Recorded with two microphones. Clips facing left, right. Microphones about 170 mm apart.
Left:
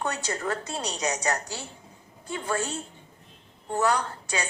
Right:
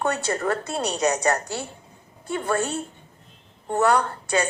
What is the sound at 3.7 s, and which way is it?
Speech, 55° right (ahead or behind).